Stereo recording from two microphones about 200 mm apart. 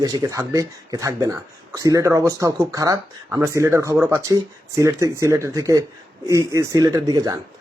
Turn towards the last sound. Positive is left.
turn(degrees=-20)  # may be behind; listen again after turning